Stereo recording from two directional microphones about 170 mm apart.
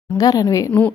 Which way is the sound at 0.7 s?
10° left (ahead or behind).